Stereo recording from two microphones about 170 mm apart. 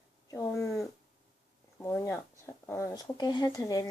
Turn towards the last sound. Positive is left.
turn(degrees=20)  # may be behind; listen again after turning